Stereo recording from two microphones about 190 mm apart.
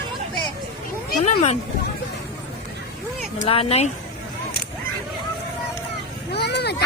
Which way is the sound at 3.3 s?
30° left (ahead or behind).